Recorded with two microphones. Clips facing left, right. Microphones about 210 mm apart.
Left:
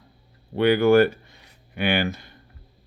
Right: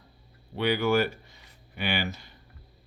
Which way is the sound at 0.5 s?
55° left (ahead or behind).